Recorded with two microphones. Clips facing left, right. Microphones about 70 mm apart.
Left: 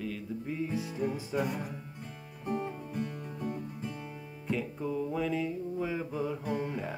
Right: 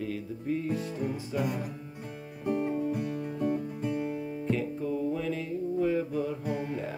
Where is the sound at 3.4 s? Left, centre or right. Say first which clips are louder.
Right 7 dB; right.